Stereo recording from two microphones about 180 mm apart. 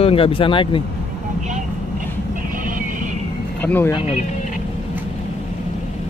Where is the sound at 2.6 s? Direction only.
50° right (ahead or behind).